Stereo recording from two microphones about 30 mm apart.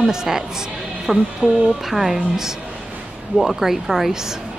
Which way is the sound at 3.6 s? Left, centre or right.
Centre.